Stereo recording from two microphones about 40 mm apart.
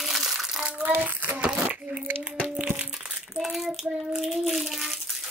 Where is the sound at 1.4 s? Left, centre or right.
Right.